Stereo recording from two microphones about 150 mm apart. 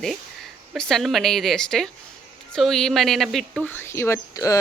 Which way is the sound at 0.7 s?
Centre (ahead or behind).